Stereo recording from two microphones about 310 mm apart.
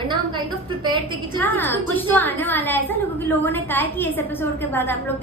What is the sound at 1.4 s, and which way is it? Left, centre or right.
A woman's voice, centre.